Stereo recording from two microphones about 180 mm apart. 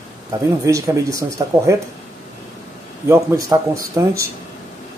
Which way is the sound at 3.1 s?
15° right (ahead or behind).